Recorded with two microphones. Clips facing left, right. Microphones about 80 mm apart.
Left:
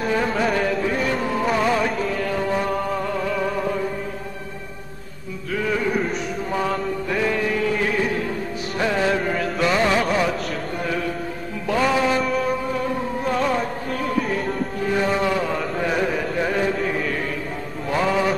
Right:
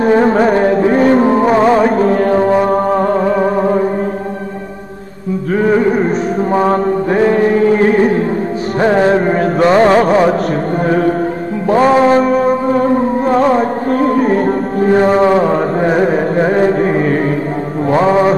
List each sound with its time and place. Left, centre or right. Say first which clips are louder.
0.0 s music: right 11 dB; right
5.5 s music: right 11 dB; right
6.5 s chant: right 11 dB; right
8.8 s music: right 10 dB; right
10.9 s chant: right 13 dB; right
11.7 s music: right 11 dB; right